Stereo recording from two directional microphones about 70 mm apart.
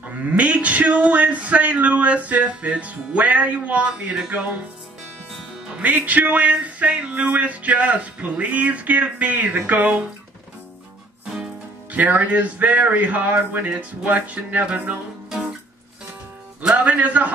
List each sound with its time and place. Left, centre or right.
0.0 s speech: right
5.8 s speech: right
11.2 s speech: centre
16.6 s speech: centre